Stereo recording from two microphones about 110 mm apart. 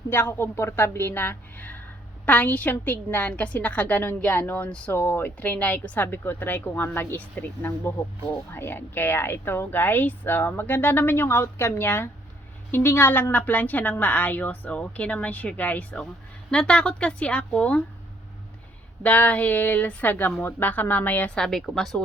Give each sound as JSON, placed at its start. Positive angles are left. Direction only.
{"t": 0.1, "sound": "a woman's voice", "side_deg": 20}
{"t": 19.0, "sound": "a woman's voice", "side_deg": 15}